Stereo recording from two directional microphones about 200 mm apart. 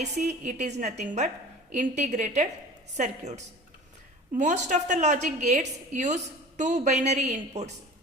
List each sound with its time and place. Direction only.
0.0 s a woman's voice: 35° right (ahead or behind)